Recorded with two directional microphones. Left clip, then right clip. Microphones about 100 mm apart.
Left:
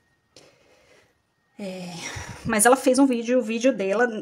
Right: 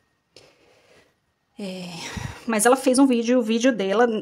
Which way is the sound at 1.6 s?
20° right (ahead or behind).